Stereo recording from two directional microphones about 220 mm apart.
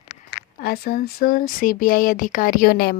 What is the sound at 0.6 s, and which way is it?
Speech, 45° left (ahead or behind).